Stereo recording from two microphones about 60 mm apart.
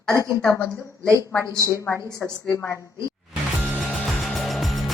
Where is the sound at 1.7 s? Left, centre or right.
Left.